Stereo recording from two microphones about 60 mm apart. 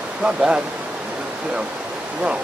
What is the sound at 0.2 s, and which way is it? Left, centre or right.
Speech, centre.